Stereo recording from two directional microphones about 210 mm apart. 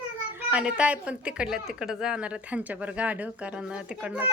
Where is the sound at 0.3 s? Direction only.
5° right (ahead or behind).